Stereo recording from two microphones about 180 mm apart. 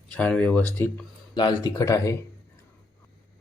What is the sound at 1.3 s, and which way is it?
Speech, 20° left (ahead or behind).